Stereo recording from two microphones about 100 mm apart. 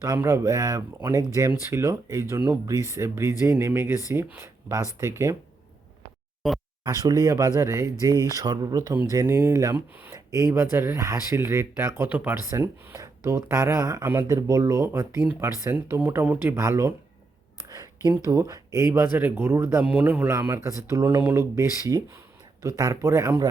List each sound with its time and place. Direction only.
0.0 s speech: 30° right (ahead or behind)
6.4 s speech: centre (ahead or behind)
6.8 s speech: 35° right (ahead or behind); by 12.4 s 20° right (ahead or behind)
12.5 s speech: 30° right (ahead or behind)
17.7 s a sound: 35° right (ahead or behind)
18.2 s speech: 35° right (ahead or behind)
20.7 s speech: 35° right (ahead or behind)